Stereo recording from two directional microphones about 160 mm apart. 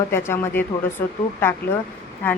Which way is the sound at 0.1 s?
15° left (ahead or behind).